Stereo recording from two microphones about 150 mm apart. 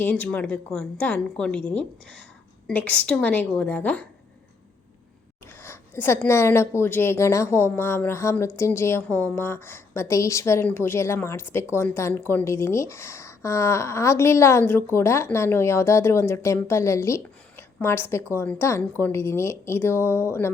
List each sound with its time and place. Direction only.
0.0 s a woman's voice: 10° left (ahead or behind)
5.6 s a woman's voice: 15° left (ahead or behind)